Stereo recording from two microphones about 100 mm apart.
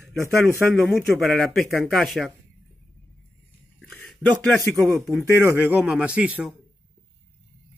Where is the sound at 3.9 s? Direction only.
15° left (ahead or behind).